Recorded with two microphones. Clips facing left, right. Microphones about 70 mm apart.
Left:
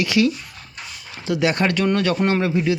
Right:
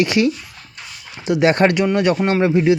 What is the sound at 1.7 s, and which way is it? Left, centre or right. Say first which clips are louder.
Speech: right 3 dB; centre.